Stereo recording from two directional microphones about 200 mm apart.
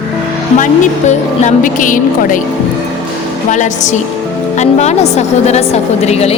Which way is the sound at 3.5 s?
35° left (ahead or behind).